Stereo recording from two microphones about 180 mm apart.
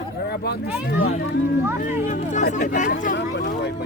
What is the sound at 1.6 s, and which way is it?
Speech, 10° right (ahead or behind).